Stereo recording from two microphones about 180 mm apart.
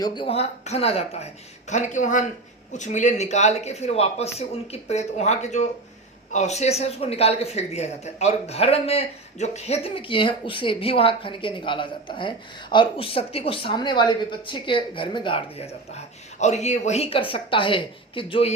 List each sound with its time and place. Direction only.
0.0 s a man's voice: 25° left (ahead or behind)